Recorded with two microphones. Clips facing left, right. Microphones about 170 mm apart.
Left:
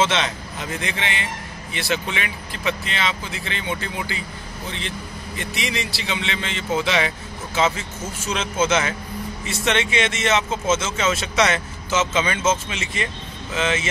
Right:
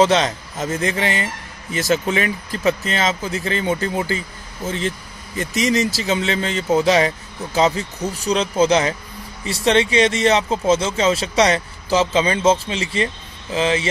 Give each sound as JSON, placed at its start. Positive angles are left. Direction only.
{"t": 0.0, "sound": "a man's voice", "side_deg": -40}